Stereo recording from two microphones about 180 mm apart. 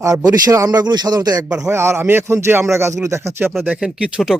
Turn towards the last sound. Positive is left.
turn(degrees=-5)  # may be behind; listen again after turning